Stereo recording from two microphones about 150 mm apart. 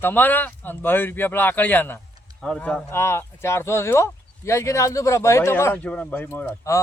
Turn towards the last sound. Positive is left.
turn(degrees=15)  # may be behind; listen again after turning